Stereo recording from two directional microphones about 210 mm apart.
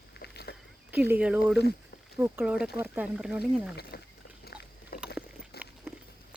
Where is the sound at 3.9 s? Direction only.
50° left (ahead or behind).